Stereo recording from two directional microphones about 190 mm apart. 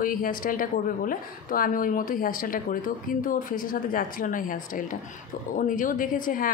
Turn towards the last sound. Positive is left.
turn(degrees=45)  # may be behind; listen again after turning